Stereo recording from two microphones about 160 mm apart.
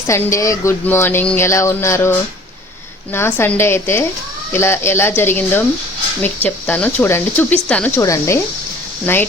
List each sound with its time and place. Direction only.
0.1 s speech: 20° left (ahead or behind)